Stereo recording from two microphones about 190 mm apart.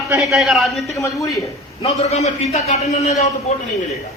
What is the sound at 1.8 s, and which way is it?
A man's voice, 35° left (ahead or behind).